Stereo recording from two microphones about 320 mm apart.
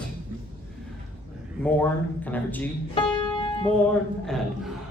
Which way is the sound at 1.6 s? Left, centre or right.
Centre.